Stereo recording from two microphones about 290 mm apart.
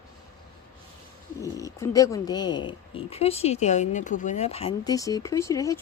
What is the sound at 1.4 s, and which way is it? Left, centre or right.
Speech, centre.